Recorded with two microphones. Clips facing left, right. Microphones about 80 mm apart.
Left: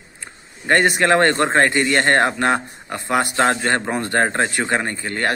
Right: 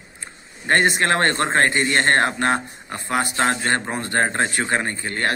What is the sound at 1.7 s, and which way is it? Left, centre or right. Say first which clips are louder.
Speech: left 2 dB; right.